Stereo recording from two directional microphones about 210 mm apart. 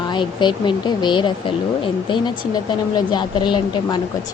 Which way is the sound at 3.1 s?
20° left (ahead or behind).